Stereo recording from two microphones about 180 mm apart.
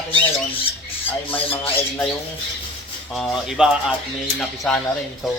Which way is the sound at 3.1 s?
Centre (ahead or behind).